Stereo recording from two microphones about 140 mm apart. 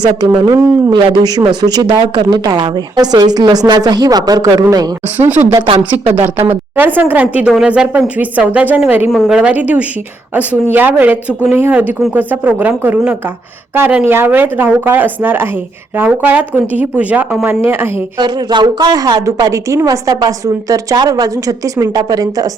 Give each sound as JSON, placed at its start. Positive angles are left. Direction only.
{"t": 0.9, "sound": "a woman's voice", "side_deg": -30}
{"t": 6.7, "sound": "a woman's voice", "side_deg": -10}
{"t": 9.0, "sound": "a woman's voice", "side_deg": 0}
{"t": 9.4, "sound": "a woman's voice", "side_deg": -10}
{"t": 18.2, "sound": "a woman's voice", "side_deg": -30}